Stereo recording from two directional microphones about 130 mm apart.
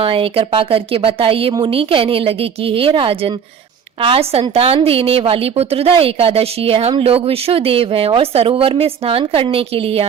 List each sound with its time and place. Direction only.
0.0 s speech: 45° right (ahead or behind)